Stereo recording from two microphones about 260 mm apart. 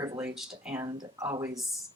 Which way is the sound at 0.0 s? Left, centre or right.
Centre.